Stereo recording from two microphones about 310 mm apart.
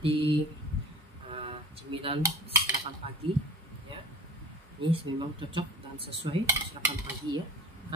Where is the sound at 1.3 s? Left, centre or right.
Centre.